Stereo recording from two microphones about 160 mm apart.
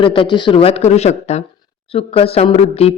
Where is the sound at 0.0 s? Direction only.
35° left (ahead or behind).